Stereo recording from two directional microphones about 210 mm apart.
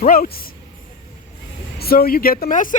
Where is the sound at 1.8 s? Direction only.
45° left (ahead or behind).